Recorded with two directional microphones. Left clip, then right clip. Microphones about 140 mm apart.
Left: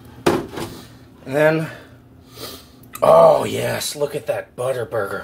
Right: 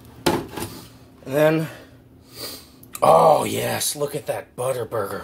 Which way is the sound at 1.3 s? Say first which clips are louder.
Left 2 dB; 35° right (ahead or behind).